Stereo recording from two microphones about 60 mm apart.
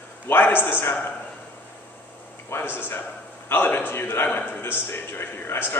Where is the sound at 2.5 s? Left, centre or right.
Left.